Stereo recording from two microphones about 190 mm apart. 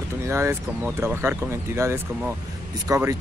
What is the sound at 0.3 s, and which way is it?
Speech, 10° right (ahead or behind).